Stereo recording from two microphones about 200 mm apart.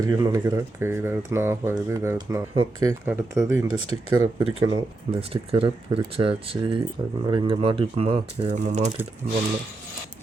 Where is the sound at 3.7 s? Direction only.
90° right.